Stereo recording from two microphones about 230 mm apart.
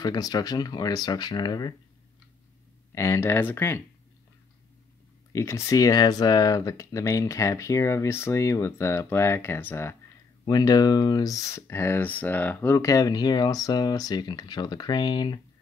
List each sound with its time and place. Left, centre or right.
0.0 s speech: centre
2.9 s speech: centre
5.3 s speech: centre